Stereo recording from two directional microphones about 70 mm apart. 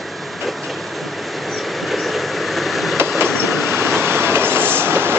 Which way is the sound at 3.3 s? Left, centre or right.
Centre.